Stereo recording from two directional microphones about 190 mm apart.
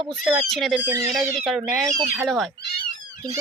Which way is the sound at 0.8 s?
15° right (ahead or behind).